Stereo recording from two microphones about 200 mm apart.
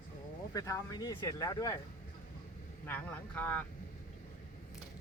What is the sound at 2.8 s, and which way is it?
Speech, 10° left (ahead or behind).